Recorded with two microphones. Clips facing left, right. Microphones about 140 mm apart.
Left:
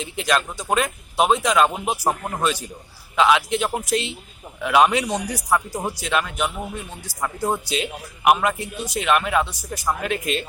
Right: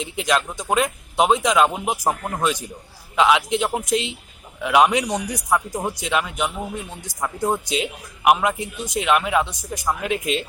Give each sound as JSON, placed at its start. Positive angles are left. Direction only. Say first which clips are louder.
{"t": 0.0, "sound": "a man's voice", "louder": "right 1 dB", "side_deg": -15}